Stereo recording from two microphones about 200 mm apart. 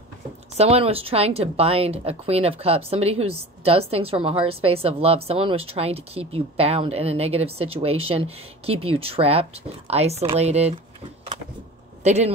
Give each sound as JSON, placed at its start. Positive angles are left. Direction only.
{"t": 0.6, "sound": "speech", "side_deg": -30}
{"t": 12.0, "sound": "speech", "side_deg": -35}